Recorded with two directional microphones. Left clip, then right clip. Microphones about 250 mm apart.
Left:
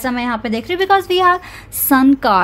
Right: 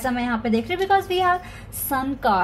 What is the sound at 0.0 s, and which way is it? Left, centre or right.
A woman's voice, left.